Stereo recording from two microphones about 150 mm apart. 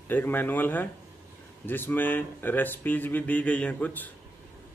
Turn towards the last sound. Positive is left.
turn(degrees=10)  # may be behind; listen again after turning